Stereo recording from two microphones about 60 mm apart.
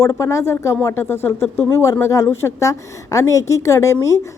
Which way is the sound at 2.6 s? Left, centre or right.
Left.